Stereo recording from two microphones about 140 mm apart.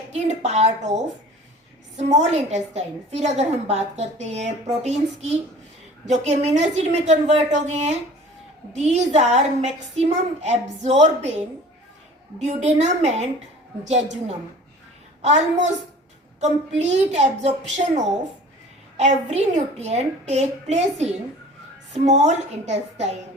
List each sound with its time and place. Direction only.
0.1 s a woman's voice: 55° right (ahead or behind)
2.0 s a woman's voice: 55° right (ahead or behind)